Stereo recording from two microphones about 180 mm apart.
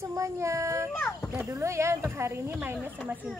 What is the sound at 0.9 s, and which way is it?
Speech, 10° left (ahead or behind).